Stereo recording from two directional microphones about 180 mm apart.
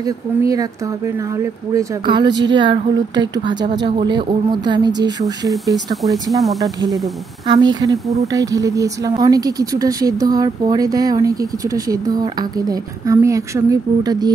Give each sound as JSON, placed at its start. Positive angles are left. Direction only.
{"t": 0.0, "sound": "speech", "side_deg": -20}
{"t": 1.7, "sound": "speech", "side_deg": -20}
{"t": 6.4, "sound": "speech", "side_deg": 0}
{"t": 7.4, "sound": "speech", "side_deg": -20}